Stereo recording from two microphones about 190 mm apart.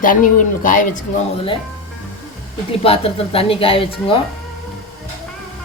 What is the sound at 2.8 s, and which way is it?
Speech, 30° left (ahead or behind).